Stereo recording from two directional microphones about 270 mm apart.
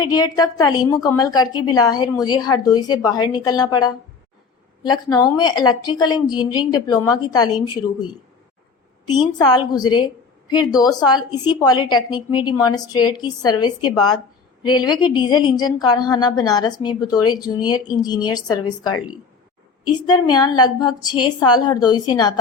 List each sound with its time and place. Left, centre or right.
0.0 s a woman's voice: centre
9.1 s a woman's voice: centre
20.1 s a woman's voice: centre